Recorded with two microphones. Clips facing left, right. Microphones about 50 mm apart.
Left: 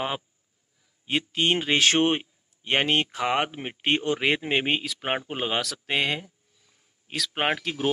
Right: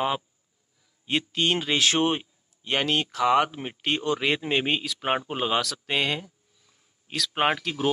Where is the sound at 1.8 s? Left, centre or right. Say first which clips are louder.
Left 2 dB; left.